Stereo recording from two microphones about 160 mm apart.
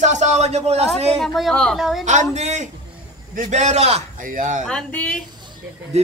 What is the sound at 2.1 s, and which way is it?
A man's voice, 45° right (ahead or behind).